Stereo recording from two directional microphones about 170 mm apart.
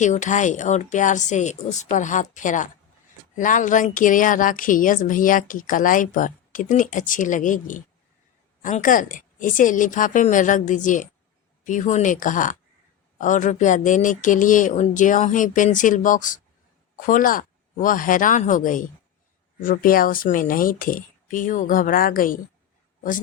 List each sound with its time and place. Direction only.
0.0 s speech: 45° left (ahead or behind)